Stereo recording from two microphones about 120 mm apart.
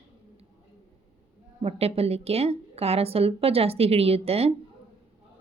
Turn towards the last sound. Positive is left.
turn(degrees=-55)  # may be behind; listen again after turning